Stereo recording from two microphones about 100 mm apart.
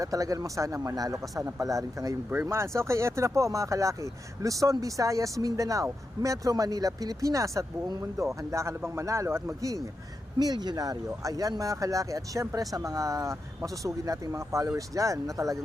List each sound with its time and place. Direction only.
0.0 s speech: 35° right (ahead or behind)
2.3 s speech: 25° right (ahead or behind)